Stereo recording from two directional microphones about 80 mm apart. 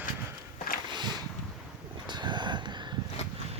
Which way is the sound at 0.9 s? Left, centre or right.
Right.